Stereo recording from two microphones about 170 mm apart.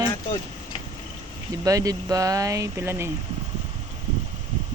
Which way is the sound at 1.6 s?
20° right (ahead or behind).